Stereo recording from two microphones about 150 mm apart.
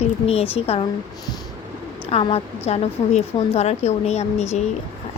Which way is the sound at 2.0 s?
40° left (ahead or behind).